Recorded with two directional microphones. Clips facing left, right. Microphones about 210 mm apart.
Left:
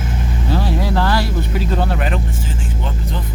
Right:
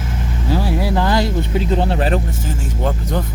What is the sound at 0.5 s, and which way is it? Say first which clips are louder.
Speech: right 1 dB; 10° right (ahead or behind).